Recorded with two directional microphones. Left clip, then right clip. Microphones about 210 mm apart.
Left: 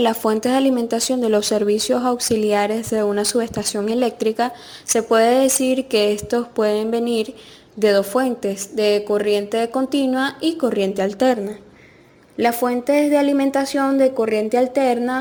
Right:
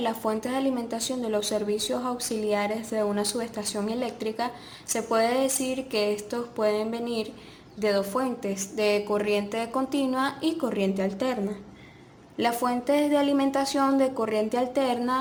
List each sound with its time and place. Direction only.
0.0 s a woman's voice: 35° left (ahead or behind)
12.4 s a woman's voice: 25° left (ahead or behind)